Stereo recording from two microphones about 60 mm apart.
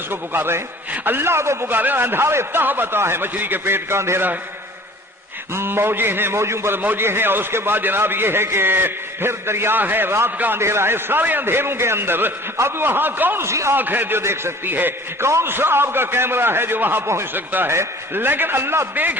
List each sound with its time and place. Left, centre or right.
0.1 s a man's voice: right
1.7 s a man's voice: right
5.5 s a man's voice: right
10.6 s a man's voice: right
13.4 s a man's voice: right
13.7 s a man's voice: right